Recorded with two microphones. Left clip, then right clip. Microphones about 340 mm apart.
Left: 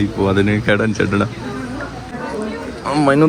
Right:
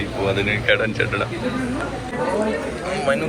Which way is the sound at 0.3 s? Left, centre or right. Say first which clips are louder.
Left 1 dB; centre.